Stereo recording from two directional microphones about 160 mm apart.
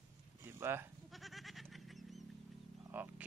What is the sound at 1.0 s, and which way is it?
Goat, centre (ahead or behind).